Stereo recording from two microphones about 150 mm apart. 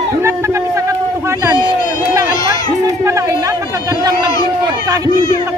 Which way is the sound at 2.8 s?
20° right (ahead or behind).